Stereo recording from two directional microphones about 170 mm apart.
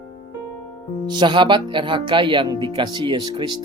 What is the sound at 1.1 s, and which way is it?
Speech, 25° right (ahead or behind).